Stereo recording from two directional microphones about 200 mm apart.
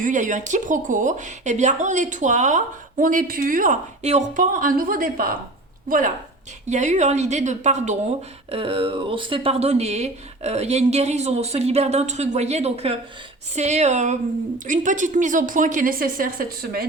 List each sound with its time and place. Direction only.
0.0 s speech: 40° right (ahead or behind)
6.7 s speech: 35° right (ahead or behind)